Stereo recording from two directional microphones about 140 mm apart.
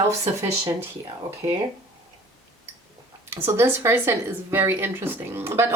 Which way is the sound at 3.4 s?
15° right (ahead or behind).